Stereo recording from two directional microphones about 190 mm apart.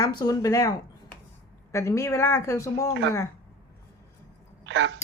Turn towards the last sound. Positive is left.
turn(degrees=-70)  # may be behind; listen again after turning